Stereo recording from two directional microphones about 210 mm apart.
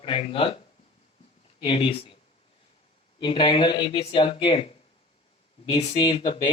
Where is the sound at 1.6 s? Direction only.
25° left (ahead or behind).